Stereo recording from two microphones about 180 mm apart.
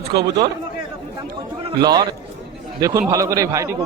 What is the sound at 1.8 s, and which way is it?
A man's voice, 20° right (ahead or behind).